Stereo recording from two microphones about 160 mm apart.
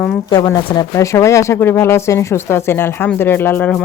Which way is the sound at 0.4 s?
25° left (ahead or behind).